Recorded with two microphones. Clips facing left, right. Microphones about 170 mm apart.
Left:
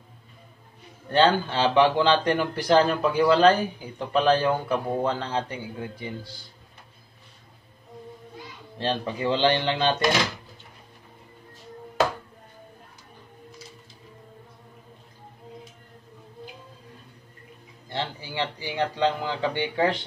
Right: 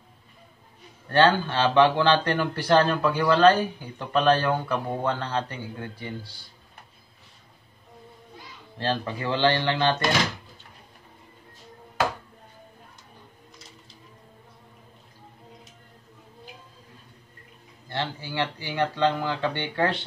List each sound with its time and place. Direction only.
1.1 s speech: 15° left (ahead or behind)
8.7 s speech: 20° left (ahead or behind)
17.8 s speech: 15° left (ahead or behind)